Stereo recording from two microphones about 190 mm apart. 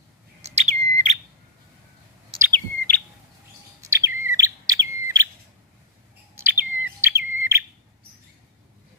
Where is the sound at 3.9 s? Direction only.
15° right (ahead or behind).